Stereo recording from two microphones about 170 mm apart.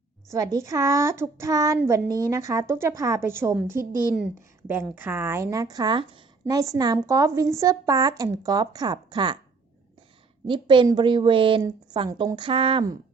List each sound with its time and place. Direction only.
0.3 s a child's voice: 20° right (ahead or behind)
4.1 s speech: centre (ahead or behind)
4.7 s a woman's voice: 10° right (ahead or behind)
10.4 s a woman's voice: 30° right (ahead or behind)